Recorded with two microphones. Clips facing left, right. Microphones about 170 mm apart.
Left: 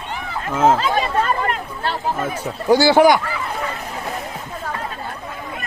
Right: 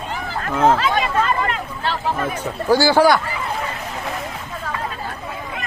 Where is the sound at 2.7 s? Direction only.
20° left (ahead or behind).